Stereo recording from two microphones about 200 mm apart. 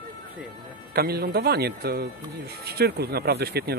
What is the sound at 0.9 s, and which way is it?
Speech, 50° right (ahead or behind).